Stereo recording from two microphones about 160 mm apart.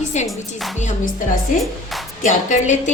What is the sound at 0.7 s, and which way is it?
Speech, 50° left (ahead or behind).